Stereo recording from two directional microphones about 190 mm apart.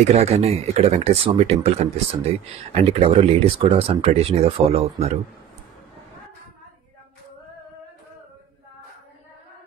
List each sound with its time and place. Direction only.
0.1 s speech: 35° right (ahead or behind)